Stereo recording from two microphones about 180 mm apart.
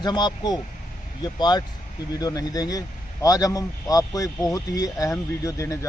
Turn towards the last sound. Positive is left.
turn(degrees=15)  # may be behind; listen again after turning